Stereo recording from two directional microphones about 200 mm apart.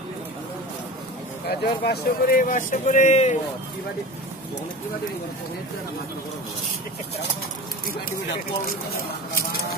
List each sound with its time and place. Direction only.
1.5 s speech: 50° left (ahead or behind); by 3.3 s 35° left (ahead or behind)